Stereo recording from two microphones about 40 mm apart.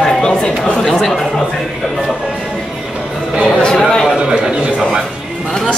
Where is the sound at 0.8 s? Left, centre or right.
Centre.